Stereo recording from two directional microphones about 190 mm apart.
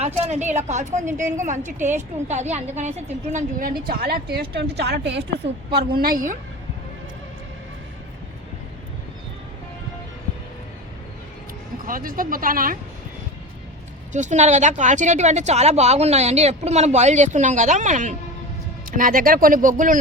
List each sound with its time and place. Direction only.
0.0 s a woman's voice: 35° right (ahead or behind); by 5.8 s 60° right (ahead or behind)
5.9 s a woman's voice: 50° right (ahead or behind)
11.9 s a woman's voice: 50° right (ahead or behind)
14.1 s a woman's voice: 40° right (ahead or behind)